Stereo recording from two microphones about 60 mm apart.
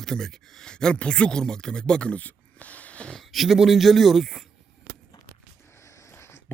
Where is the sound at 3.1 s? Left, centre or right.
Centre.